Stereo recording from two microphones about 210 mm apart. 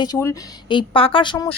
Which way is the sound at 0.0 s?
15° left (ahead or behind).